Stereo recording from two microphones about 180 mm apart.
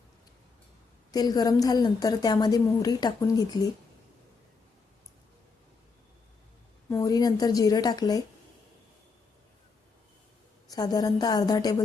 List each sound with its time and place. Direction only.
1.1 s a woman's voice: 20° left (ahead or behind)
6.9 s a woman's voice: 20° left (ahead or behind)
10.7 s a woman's voice: 20° left (ahead or behind)